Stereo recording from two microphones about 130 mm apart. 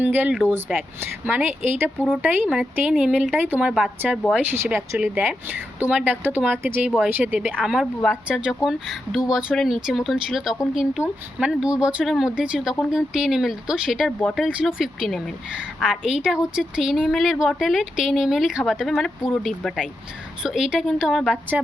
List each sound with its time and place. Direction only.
0.0 s a woman's voice: 15° right (ahead or behind)
4.4 s a woman's voice: 20° right (ahead or behind); by 21.3 s centre (ahead or behind)